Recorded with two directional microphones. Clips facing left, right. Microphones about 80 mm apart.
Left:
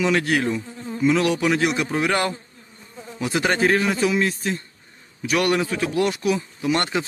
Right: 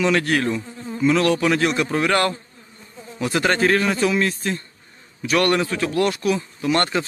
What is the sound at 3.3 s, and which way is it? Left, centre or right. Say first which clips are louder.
Speech: right 1 dB; centre.